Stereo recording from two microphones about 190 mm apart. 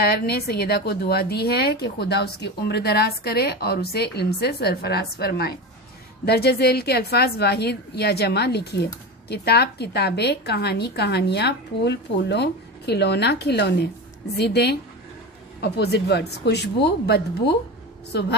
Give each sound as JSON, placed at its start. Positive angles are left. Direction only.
{"t": 0.0, "sound": "a woman's voice", "side_deg": 55}